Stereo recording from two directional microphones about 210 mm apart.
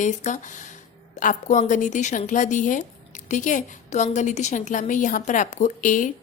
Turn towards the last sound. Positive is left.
turn(degrees=40)  # may be behind; listen again after turning